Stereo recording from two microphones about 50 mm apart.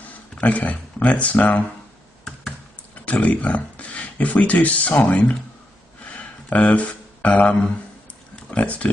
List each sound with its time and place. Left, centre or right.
0.4 s speech: left
2.9 s speech: left
6.1 s a sound: left
8.5 s speech: left